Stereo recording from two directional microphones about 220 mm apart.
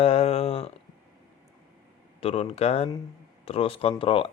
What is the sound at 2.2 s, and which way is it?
Speech, 25° left (ahead or behind).